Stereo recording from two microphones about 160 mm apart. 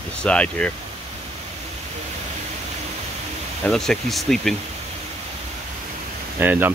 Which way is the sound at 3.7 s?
Centre (ahead or behind).